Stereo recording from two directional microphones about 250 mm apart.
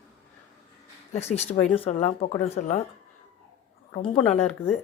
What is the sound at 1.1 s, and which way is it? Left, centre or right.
Speech, left.